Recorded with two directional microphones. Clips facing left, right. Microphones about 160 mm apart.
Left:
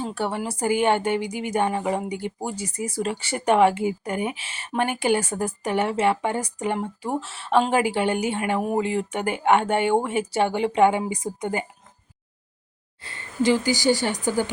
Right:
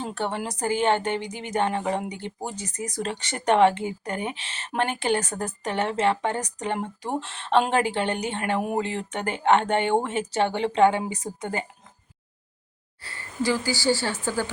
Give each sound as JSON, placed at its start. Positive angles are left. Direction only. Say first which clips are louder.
{"t": 0.0, "sound": "speech", "louder": "left 2 dB", "side_deg": 10}
{"t": 13.0, "sound": "speech", "louder": "left 4 dB", "side_deg": 20}